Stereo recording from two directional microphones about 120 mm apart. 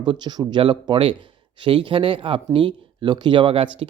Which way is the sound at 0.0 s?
35° right (ahead or behind).